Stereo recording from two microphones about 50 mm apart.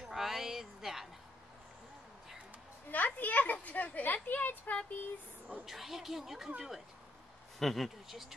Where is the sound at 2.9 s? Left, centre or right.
Left.